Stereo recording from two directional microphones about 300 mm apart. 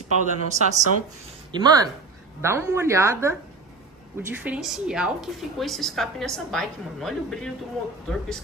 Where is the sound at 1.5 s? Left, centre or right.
Centre.